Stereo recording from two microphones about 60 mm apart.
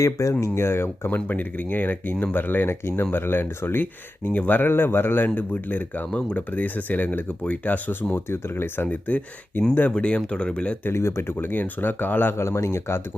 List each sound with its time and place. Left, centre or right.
0.0 s speech: left
8.1 s speech: left; by 10.8 s centre
10.8 s speech: left